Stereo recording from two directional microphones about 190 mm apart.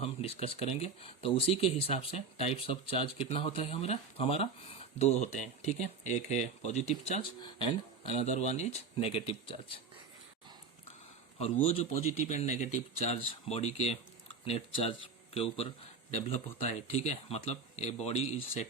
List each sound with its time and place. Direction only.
0.0 s speech: 30° left (ahead or behind)
7.3 s speech: 25° left (ahead or behind)
11.6 s speech: 35° left (ahead or behind)